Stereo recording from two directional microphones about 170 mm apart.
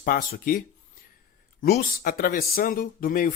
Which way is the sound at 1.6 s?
60° left (ahead or behind).